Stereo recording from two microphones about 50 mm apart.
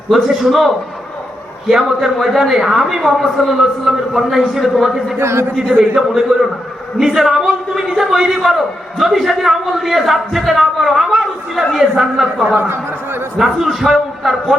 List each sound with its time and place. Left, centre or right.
0.1 s a man's voice: centre
5.2 s speech: right
6.0 s a man's voice: centre
12.5 s speech: right
13.4 s a man's voice: centre